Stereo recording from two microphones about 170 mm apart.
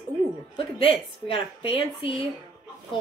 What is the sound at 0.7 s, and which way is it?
A woman's voice, 35° left (ahead or behind).